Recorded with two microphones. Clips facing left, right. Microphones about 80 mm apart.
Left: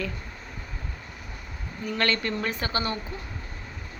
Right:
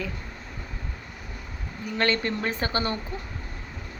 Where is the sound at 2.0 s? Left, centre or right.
Right.